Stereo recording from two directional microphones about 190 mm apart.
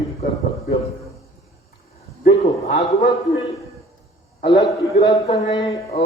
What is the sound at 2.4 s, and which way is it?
Speech, 35° left (ahead or behind).